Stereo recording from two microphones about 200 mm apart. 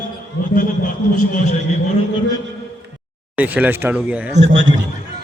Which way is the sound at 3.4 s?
10° right (ahead or behind).